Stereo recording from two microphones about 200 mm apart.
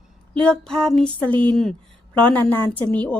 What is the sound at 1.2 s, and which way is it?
Speech, 25° right (ahead or behind).